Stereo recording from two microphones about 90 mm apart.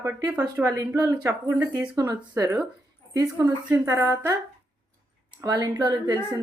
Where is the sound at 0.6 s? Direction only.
40° right (ahead or behind).